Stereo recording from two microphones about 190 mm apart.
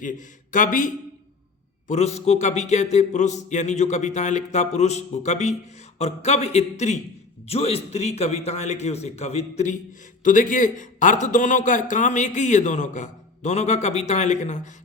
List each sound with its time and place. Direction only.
0.0 s a man's voice: 45° left (ahead or behind)
1.9 s a man's voice: 35° left (ahead or behind)